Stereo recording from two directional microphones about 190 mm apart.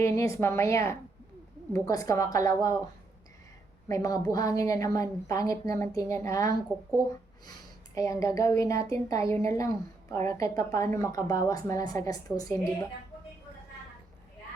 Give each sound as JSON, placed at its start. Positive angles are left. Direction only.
{"t": 0.0, "sound": "a woman's voice", "side_deg": 15}
{"t": 3.8, "sound": "a woman's voice", "side_deg": 20}
{"t": 7.9, "sound": "a woman's voice", "side_deg": 15}